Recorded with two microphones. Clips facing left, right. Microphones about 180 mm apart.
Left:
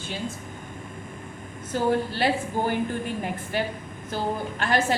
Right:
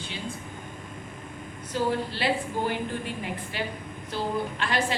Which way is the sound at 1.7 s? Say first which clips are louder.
Left 4 dB; 45° left (ahead or behind).